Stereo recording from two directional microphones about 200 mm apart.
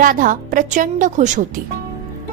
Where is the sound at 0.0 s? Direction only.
40° right (ahead or behind).